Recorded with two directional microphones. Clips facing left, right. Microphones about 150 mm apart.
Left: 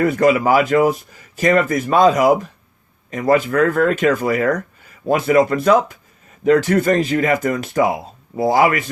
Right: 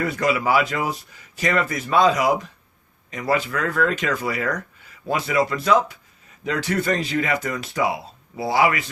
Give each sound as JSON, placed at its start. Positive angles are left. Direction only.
{"t": 0.0, "sound": "speech", "side_deg": 50}